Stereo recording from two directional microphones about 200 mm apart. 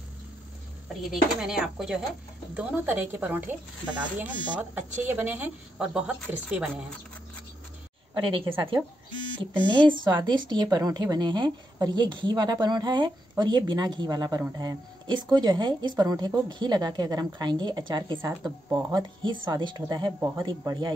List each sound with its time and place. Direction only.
1.1 s speech: centre (ahead or behind)
8.1 s a woman's voice: 25° right (ahead or behind)
10.0 s a woman's voice: 20° right (ahead or behind)